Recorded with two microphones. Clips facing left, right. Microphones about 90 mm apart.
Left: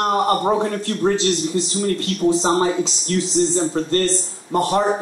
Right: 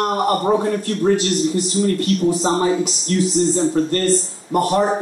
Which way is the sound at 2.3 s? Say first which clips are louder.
Left 3 dB; 20° left (ahead or behind).